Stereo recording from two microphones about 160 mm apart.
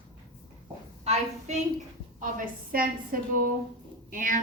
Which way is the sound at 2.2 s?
60° right (ahead or behind).